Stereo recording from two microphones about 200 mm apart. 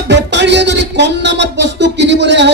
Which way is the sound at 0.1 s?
60° right (ahead or behind).